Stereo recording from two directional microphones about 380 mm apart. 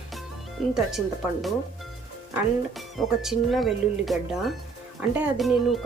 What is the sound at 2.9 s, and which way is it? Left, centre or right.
Speech, centre.